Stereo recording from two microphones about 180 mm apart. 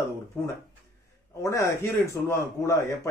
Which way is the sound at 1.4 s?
15° left (ahead or behind).